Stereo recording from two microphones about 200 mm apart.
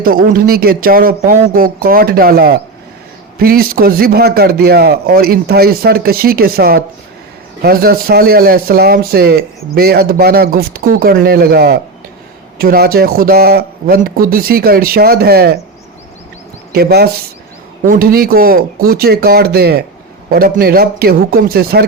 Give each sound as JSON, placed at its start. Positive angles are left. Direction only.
{"t": 0.0, "sound": "a man's voice", "side_deg": -45}
{"t": 16.7, "sound": "a man's voice", "side_deg": -50}